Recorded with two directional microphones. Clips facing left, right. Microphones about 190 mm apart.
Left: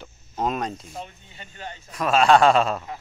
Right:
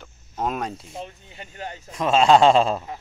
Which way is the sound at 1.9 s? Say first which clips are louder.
Right 1 dB; 25° right (ahead or behind).